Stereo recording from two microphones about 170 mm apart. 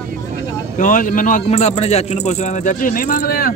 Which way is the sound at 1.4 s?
35° left (ahead or behind).